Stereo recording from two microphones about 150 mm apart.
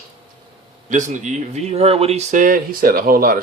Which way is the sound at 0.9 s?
55° right (ahead or behind).